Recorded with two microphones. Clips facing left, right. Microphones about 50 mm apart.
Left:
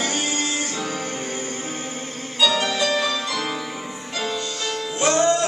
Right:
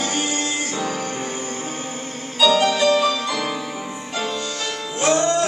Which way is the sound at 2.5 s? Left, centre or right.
Centre.